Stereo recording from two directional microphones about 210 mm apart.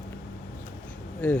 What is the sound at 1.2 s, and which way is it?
Speech, 5° left (ahead or behind).